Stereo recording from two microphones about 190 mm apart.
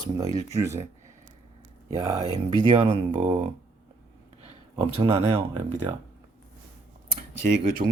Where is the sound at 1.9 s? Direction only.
20° right (ahead or behind).